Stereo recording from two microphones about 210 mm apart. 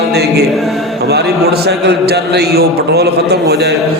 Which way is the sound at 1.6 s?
50° right (ahead or behind).